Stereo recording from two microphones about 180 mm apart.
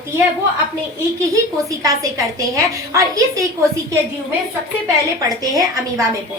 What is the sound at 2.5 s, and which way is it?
Speech, 20° right (ahead or behind).